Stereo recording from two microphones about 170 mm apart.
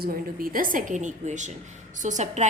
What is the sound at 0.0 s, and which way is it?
A woman's voice, 60° right (ahead or behind).